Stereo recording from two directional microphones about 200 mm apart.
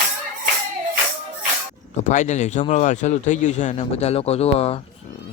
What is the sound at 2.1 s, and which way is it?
A man's voice, 35° left (ahead or behind).